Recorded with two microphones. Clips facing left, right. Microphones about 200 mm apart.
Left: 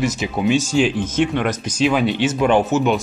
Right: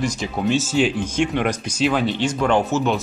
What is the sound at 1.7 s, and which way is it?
Speech, 5° left (ahead or behind).